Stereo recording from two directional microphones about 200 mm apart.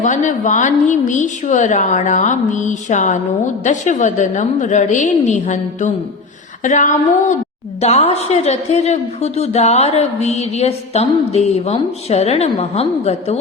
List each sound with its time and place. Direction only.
0.0 s a woman's voice: 40° left (ahead or behind)